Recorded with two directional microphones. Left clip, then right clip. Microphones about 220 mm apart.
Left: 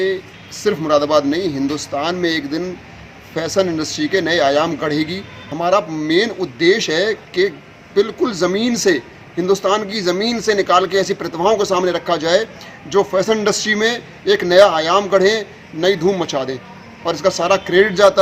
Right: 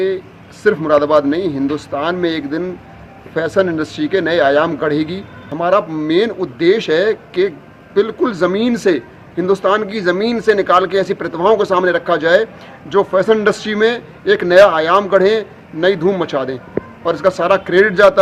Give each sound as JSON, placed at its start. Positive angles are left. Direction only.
{"t": 0.6, "sound": "speech", "side_deg": 5}